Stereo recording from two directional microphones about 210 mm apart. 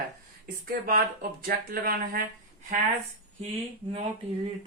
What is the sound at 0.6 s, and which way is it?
Speech, 45° right (ahead or behind).